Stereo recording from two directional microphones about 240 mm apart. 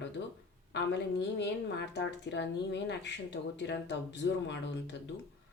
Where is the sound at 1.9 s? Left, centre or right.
Left.